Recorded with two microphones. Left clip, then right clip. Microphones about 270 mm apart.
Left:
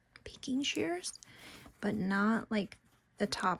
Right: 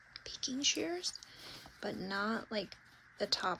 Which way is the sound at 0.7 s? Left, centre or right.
Left.